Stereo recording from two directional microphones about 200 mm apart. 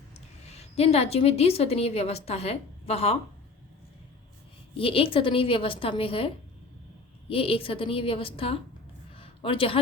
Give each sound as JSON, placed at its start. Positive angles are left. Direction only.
{"t": 0.1, "sound": "a woman's voice", "side_deg": 30}
{"t": 4.8, "sound": "a woman's voice", "side_deg": 30}
{"t": 9.1, "sound": "a sound", "side_deg": 25}